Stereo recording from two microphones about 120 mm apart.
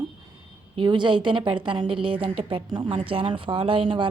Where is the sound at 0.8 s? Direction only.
40° right (ahead or behind).